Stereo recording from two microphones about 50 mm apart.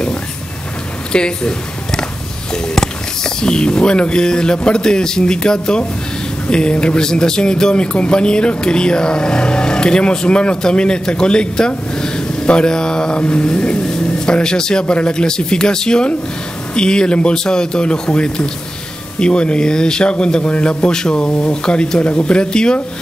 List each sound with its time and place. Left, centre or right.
1.1 s speech: centre